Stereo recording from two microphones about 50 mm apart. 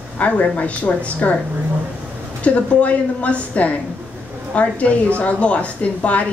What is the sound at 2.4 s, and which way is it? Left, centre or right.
A woman's voice, left.